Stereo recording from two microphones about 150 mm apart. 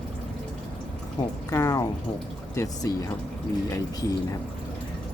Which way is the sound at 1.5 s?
20° left (ahead or behind).